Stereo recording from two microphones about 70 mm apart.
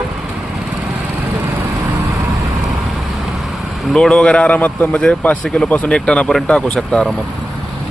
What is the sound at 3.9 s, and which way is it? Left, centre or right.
Speech, centre.